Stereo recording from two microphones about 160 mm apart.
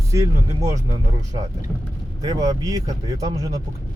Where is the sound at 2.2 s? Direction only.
25° right (ahead or behind).